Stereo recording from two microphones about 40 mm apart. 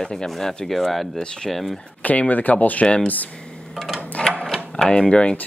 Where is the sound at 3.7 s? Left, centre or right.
Centre.